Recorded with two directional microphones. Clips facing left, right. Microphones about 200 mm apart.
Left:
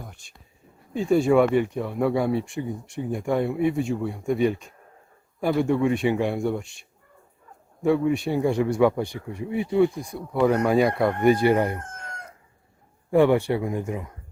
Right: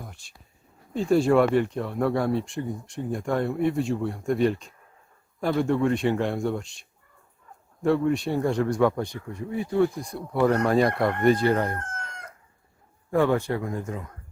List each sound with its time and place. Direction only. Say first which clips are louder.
0.9 s speech: left 1 dB; centre (ahead or behind)
7.8 s speech: left 1 dB; 5° left (ahead or behind)
9.7 s speech: left 2 dB; 5° left (ahead or behind)
13.1 s speech: left 4 dB; 15° left (ahead or behind)